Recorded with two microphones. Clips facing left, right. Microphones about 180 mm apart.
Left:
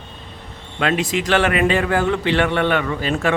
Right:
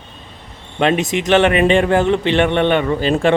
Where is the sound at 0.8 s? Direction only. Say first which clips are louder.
Right 4 dB; 20° right (ahead or behind).